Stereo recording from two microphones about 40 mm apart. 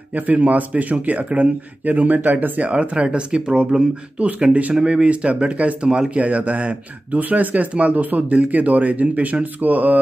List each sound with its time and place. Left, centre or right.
0.1 s speech: right
2.7 s speech: right
6.1 s speech: right